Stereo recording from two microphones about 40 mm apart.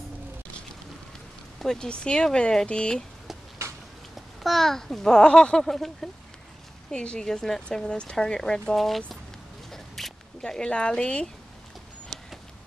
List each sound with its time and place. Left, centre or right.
1.8 s speech: left
4.4 s a child's voice: centre; by 5.6 s left
5.6 s a child's voice: centre
6.9 s speech: left
7.2 s a child's voice: centre
8.7 s speech: centre
9.7 s a sound: centre
10.4 s speech: left